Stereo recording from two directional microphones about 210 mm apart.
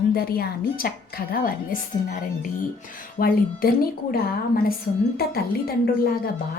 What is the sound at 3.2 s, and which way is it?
Speech, 45° left (ahead or behind).